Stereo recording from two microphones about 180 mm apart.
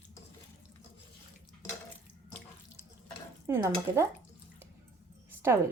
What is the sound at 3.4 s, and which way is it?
Stir, 15° right (ahead or behind).